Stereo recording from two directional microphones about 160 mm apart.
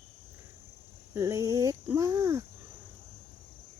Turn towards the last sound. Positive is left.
turn(degrees=-20)  # may be behind; listen again after turning